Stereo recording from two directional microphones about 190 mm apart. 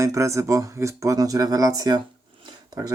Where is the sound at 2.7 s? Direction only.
20° right (ahead or behind).